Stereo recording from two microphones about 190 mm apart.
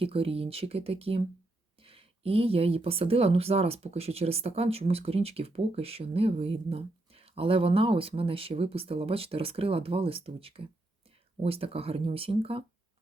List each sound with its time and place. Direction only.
0.0 s speech: 30° right (ahead or behind)